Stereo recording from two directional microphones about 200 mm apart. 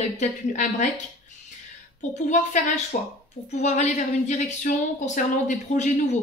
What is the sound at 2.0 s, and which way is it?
Speech, 35° left (ahead or behind).